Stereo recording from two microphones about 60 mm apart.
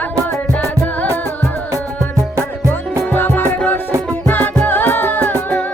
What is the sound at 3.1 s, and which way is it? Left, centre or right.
Music, left.